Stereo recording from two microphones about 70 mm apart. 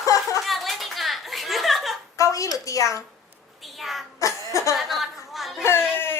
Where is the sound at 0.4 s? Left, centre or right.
Centre.